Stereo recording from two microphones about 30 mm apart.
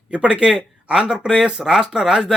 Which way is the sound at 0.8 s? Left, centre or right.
Right.